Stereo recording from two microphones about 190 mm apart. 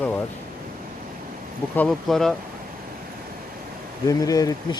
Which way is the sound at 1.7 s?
5° left (ahead or behind).